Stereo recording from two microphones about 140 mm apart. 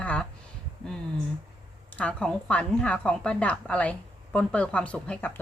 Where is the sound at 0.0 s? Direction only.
10° left (ahead or behind).